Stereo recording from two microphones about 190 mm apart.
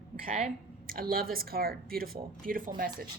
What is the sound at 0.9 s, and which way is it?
Speech, 50° right (ahead or behind).